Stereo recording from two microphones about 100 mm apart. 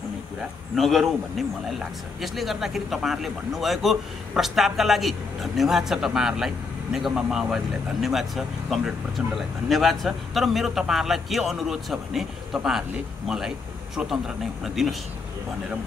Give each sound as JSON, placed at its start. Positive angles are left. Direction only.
{"t": 0.7, "sound": "a man's voice", "side_deg": 0}
{"t": 2.2, "sound": "a man's voice", "side_deg": 0}
{"t": 13.9, "sound": "a man's voice", "side_deg": -5}